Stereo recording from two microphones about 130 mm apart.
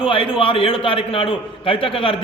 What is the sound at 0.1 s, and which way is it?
A man's voice, 40° left (ahead or behind).